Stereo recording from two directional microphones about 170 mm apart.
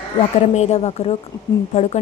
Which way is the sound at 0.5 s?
40° left (ahead or behind).